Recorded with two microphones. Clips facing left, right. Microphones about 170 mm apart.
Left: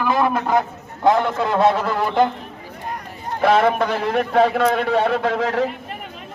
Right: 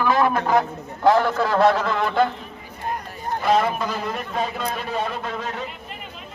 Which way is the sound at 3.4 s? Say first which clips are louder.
Left 5 dB; 65° left (ahead or behind).